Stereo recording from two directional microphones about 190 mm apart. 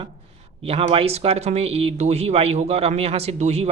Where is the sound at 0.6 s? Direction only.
30° right (ahead or behind).